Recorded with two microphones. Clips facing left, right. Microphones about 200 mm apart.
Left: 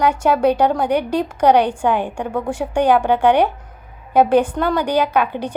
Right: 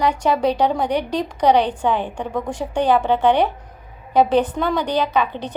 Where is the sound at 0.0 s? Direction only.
5° left (ahead or behind).